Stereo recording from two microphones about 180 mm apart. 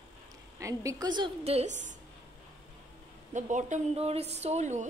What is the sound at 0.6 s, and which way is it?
A woman's voice, 15° right (ahead or behind).